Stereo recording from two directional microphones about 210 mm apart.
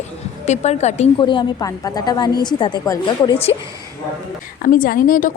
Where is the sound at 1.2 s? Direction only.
20° left (ahead or behind).